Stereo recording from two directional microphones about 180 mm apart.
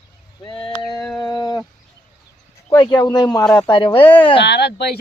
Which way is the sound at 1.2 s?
20° left (ahead or behind).